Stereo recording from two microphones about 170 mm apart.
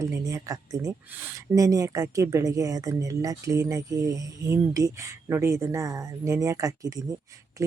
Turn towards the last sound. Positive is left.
turn(degrees=-20)  # may be behind; listen again after turning